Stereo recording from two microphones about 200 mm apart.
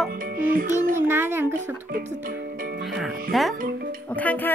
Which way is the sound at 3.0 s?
Centre (ahead or behind).